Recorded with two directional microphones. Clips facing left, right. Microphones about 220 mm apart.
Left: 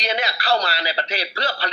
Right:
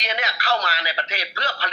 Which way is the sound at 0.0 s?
35° left (ahead or behind).